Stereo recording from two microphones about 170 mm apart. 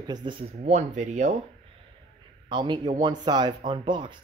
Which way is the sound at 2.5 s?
25° right (ahead or behind).